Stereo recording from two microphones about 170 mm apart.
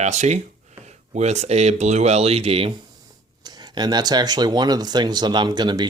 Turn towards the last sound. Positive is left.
turn(degrees=-25)  # may be behind; listen again after turning